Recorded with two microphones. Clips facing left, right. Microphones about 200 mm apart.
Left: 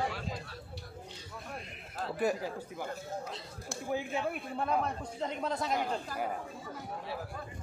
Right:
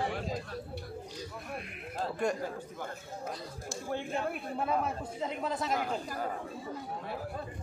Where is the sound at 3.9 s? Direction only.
Centre (ahead or behind).